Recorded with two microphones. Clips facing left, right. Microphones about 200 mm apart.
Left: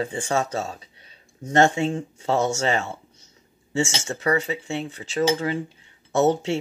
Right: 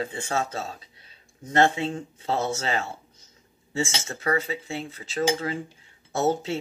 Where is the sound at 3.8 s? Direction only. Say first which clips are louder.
Left 4 dB; 75° left (ahead or behind).